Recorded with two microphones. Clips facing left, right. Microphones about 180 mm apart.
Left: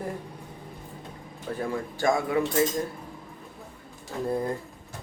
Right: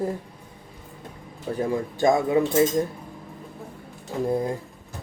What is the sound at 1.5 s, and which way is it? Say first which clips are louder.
Speech: right 5 dB; 15° right (ahead or behind).